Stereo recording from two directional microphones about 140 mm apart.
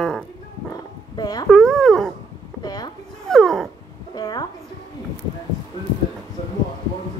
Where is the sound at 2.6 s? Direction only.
30° left (ahead or behind).